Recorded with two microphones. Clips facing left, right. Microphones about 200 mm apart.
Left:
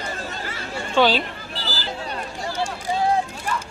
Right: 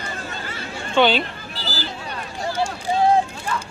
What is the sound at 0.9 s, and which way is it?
Speech, centre (ahead or behind).